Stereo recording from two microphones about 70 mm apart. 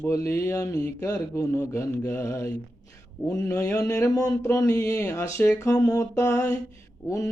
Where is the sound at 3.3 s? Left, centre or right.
Left.